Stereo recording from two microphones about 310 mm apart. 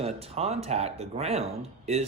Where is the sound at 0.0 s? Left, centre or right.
Centre.